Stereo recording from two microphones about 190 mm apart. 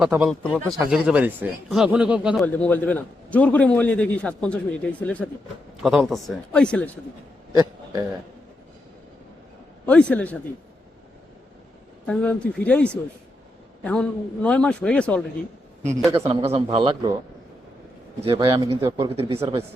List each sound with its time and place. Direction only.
0.0 s a man's voice: 5° right (ahead or behind)
2.4 s a man's voice: 5° left (ahead or behind)
7.5 s a sound: 20° right (ahead or behind)
9.8 s a man's voice: 5° left (ahead or behind)
12.0 s a man's voice: 5° left (ahead or behind)
16.3 s speech: 30° right (ahead or behind)
18.2 s speech: 25° right (ahead or behind)